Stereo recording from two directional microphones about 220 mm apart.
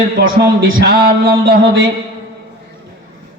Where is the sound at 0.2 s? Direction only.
55° right (ahead or behind).